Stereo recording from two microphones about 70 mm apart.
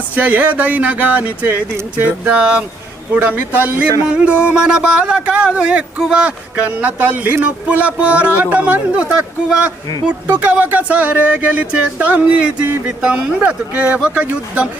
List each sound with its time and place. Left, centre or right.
0.2 s speech: right